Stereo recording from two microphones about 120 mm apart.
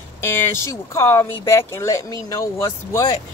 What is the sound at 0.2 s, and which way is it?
Speech, 20° left (ahead or behind).